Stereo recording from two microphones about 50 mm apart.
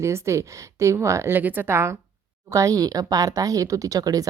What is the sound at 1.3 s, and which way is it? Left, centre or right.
Speech, right.